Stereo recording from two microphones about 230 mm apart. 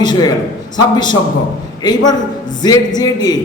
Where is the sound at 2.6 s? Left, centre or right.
Centre.